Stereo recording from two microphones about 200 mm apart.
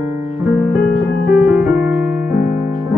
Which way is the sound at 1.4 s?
5° right (ahead or behind).